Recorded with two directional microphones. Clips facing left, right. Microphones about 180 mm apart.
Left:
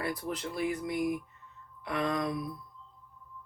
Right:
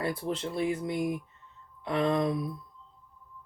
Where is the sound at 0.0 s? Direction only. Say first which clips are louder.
Right 3 dB; 25° right (ahead or behind).